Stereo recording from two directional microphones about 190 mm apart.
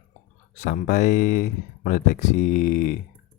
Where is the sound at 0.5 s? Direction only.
40° left (ahead or behind).